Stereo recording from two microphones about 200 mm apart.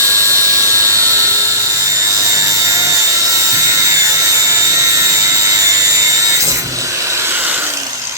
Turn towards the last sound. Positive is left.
turn(degrees=-10)  # may be behind; listen again after turning